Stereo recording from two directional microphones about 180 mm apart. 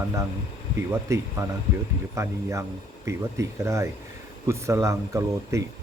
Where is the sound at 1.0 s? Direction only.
15° right (ahead or behind).